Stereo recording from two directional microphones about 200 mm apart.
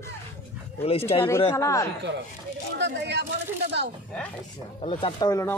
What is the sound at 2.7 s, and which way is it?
Speech, 60° right (ahead or behind).